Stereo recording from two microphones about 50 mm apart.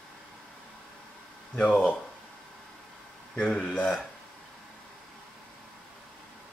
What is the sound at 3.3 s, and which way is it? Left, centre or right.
Speech, centre.